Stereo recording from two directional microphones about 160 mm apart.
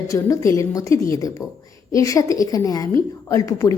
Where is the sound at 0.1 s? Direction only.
20° left (ahead or behind).